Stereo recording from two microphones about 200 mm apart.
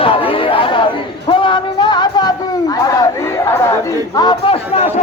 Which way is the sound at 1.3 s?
25° left (ahead or behind).